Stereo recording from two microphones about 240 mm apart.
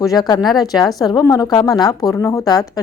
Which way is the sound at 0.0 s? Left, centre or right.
Centre.